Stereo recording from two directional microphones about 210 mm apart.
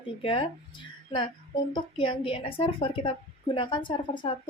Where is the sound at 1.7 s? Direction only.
25° left (ahead or behind).